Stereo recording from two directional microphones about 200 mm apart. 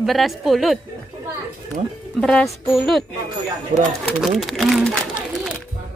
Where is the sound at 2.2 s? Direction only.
Centre (ahead or behind).